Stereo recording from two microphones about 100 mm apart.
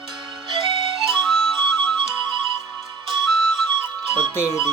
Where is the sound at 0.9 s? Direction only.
Centre (ahead or behind).